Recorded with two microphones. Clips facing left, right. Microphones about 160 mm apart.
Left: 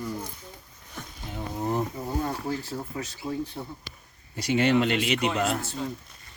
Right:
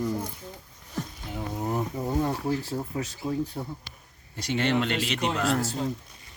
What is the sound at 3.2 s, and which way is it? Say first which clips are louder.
Speech: right 2 dB; centre (ahead or behind).